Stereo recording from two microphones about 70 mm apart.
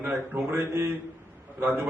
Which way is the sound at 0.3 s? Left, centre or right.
Right.